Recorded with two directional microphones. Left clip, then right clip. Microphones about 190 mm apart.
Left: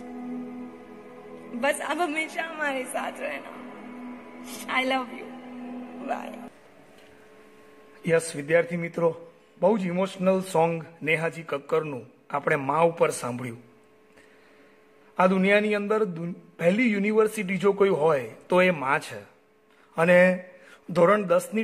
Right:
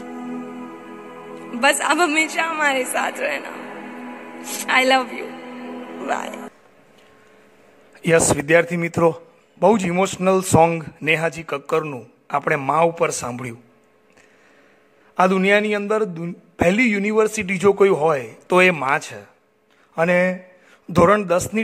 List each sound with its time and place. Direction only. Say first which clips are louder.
0.0 s music: right 6 dB; 40° right (ahead or behind)
8.0 s a man's voice: right 8 dB; 35° right (ahead or behind); by 13.6 s 20° right (ahead or behind)
15.1 s a man's voice: right 5 dB; 25° right (ahead or behind)
20.9 s a man's voice: right 5 dB; 25° right (ahead or behind)